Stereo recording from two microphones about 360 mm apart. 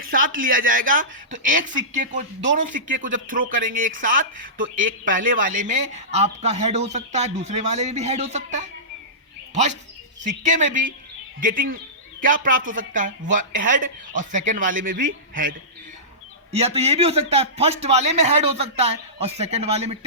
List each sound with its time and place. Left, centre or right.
0.0 s speech: right
10.2 s a man's voice: right